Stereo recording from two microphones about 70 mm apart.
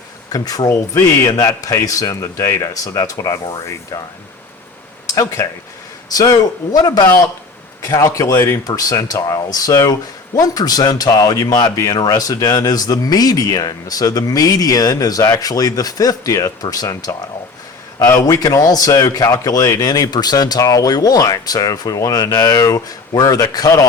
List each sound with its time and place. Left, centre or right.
0.3 s speech: left
5.1 s speech: left
6.1 s speech: left
8.6 s speech: left
19.8 s speech: left
22.6 s speech: left